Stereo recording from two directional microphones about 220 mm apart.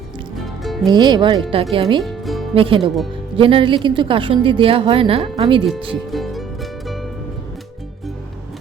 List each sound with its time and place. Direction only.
0.3 s music: centre (ahead or behind)
0.9 s a woman's voice: 20° right (ahead or behind)
2.0 s music: centre (ahead or behind)
2.6 s a woman's voice: 25° right (ahead or behind)
6.1 s music: centre (ahead or behind)